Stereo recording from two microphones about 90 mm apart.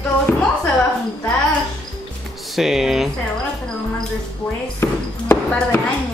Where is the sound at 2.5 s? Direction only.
5° right (ahead or behind).